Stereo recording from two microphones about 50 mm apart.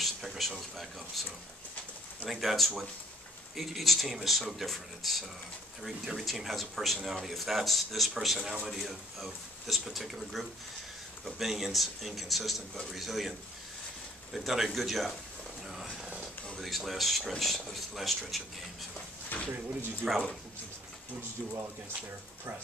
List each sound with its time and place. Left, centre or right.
0.0 s speech: centre
2.2 s speech: centre
14.3 s speech: centre
16.5 s speech: centre
19.2 s a sound: left
20.0 s speech: right